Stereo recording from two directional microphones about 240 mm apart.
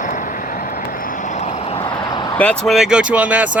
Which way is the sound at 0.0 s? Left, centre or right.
Left.